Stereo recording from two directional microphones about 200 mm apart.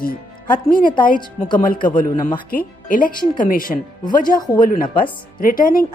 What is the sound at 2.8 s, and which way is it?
Speech, 45° left (ahead or behind).